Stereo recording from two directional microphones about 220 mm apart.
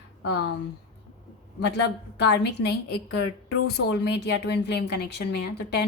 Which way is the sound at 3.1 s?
90° left.